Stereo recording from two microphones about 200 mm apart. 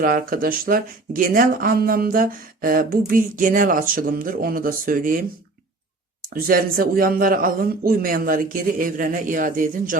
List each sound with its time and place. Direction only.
0.0 s speech: 45° right (ahead or behind)
6.3 s speech: 45° right (ahead or behind)